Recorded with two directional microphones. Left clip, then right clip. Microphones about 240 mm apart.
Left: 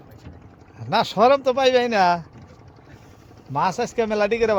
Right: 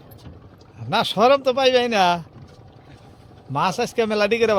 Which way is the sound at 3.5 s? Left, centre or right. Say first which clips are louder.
Even; centre.